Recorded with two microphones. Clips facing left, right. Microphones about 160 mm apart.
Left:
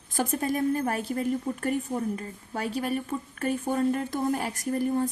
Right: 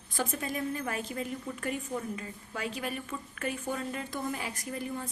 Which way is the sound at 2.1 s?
35° left (ahead or behind).